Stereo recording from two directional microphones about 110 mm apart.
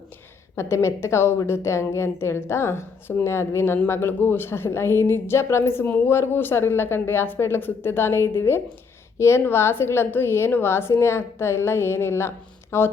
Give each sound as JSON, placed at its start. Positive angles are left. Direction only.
{"t": 0.5, "sound": "a woman's voice", "side_deg": 25}